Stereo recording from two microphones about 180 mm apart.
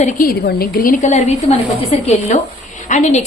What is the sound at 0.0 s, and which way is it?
A woman's voice, 50° left (ahead or behind).